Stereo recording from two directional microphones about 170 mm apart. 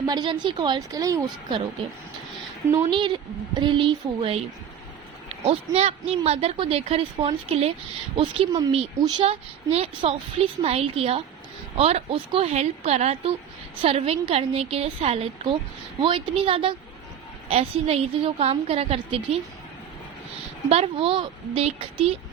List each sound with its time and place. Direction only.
0.0 s a woman's voice: 25° right (ahead or behind)
2.9 s a woman's voice: 25° right (ahead or behind)
5.5 s a woman's voice: 35° right (ahead or behind)
20.7 s a woman's voice: 35° right (ahead or behind)